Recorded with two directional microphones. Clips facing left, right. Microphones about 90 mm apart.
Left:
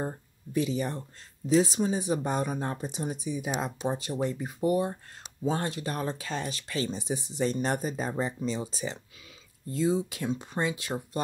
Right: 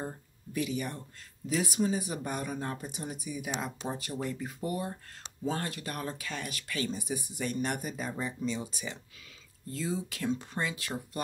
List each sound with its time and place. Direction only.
0.0 s speech: 30° left (ahead or behind)
9.7 s speech: 20° left (ahead or behind)